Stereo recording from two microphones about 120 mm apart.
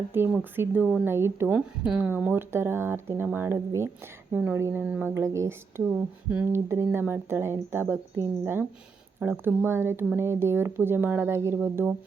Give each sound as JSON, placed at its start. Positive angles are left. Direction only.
{"t": 0.1, "sound": "speech", "side_deg": -20}